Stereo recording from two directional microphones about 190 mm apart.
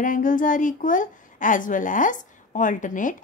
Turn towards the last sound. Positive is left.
turn(degrees=45)  # may be behind; listen again after turning